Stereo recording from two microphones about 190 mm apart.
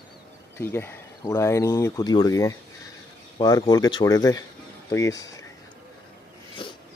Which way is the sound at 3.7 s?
20° left (ahead or behind).